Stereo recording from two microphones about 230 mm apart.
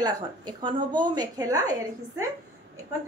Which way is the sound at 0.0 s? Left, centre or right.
Centre.